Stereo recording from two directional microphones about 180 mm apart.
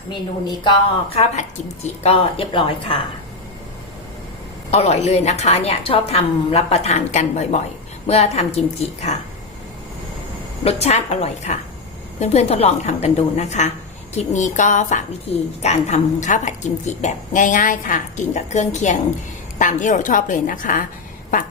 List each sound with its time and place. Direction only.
1.1 s a woman's voice: 35° left (ahead or behind)
4.7 s a woman's voice: 35° left (ahead or behind)
10.6 s a woman's voice: 35° left (ahead or behind)